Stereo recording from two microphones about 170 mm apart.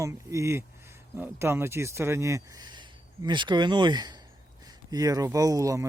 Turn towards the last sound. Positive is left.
turn(degrees=-20)  # may be behind; listen again after turning